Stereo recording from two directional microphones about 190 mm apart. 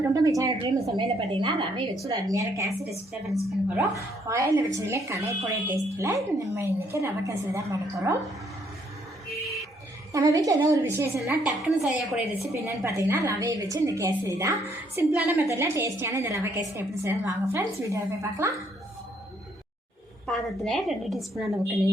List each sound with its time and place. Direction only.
0.0 s a woman's voice: 20° right (ahead or behind)
3.8 s a woman's voice: 15° right (ahead or behind)
10.1 s a woman's voice: 20° right (ahead or behind)
11.6 s a woman's voice: centre (ahead or behind)
12.5 s a woman's voice: 15° right (ahead or behind)
20.2 s a woman's voice: centre (ahead or behind)